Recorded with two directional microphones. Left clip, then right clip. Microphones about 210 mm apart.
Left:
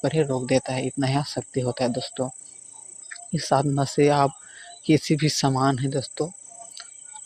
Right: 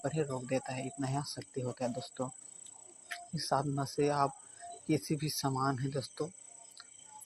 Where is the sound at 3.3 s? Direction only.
40° left (ahead or behind).